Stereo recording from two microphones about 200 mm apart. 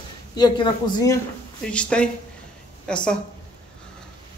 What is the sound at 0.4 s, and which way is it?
Speech, 20° left (ahead or behind).